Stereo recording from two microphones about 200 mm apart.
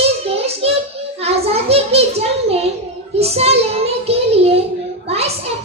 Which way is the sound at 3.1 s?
30° right (ahead or behind).